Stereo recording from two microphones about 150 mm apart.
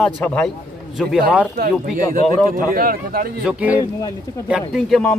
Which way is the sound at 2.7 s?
75° right (ahead or behind).